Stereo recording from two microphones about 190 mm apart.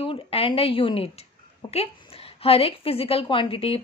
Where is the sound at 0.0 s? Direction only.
30° left (ahead or behind).